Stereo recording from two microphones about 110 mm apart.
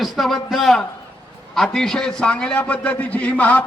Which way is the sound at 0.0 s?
Centre (ahead or behind).